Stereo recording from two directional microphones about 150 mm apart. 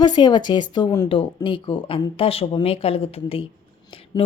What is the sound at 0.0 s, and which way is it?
A woman's voice, 30° left (ahead or behind).